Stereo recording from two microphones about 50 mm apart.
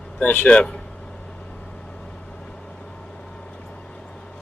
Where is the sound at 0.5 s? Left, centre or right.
Centre.